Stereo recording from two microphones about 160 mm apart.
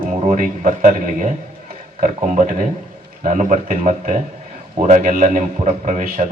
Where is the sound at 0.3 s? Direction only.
55° right (ahead or behind).